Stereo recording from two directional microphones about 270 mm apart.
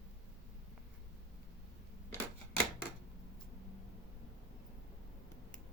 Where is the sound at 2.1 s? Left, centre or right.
Centre.